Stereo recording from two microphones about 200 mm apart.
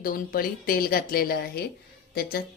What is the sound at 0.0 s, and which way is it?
Speech, 45° left (ahead or behind).